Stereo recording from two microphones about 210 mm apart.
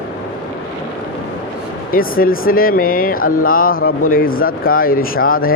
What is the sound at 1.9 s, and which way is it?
A man's voice, 45° left (ahead or behind).